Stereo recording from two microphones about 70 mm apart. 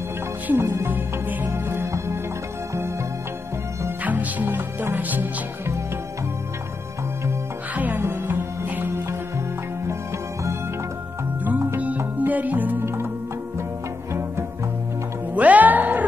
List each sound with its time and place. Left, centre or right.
0.5 s speech: right
1.5 s music: right
4.0 s music: right
7.7 s music: right
11.4 s music: right
15.3 s music: right